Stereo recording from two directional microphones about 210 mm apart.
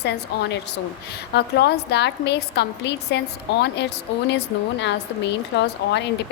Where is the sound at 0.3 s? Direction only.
50° left (ahead or behind).